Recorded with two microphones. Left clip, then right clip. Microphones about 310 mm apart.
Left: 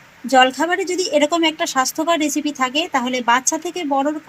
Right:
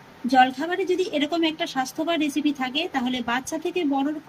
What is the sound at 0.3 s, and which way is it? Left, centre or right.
A woman's voice, centre.